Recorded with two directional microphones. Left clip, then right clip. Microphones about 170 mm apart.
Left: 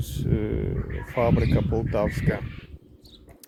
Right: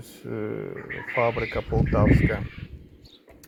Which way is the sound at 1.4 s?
30° left (ahead or behind).